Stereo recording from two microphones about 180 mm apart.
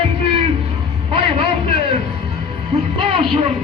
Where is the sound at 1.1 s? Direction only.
30° right (ahead or behind).